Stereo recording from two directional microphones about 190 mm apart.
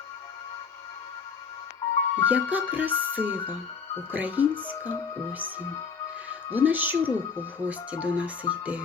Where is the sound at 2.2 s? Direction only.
10° right (ahead or behind).